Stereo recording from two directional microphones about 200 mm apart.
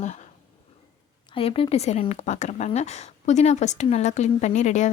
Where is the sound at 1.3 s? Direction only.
30° left (ahead or behind).